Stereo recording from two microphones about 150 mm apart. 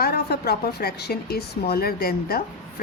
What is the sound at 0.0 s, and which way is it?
A woman's voice, 90° left.